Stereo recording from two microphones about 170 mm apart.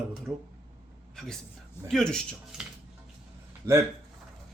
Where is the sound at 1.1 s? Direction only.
5° left (ahead or behind).